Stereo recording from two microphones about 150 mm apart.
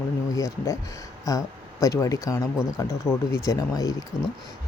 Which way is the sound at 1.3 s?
20° left (ahead or behind).